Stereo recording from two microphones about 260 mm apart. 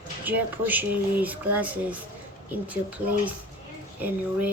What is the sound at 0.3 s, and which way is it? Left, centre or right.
Speech, centre.